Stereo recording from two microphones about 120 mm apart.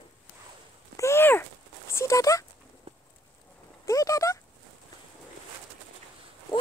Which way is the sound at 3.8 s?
30° left (ahead or behind).